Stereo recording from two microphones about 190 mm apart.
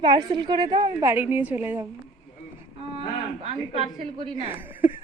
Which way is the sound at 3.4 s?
30° right (ahead or behind).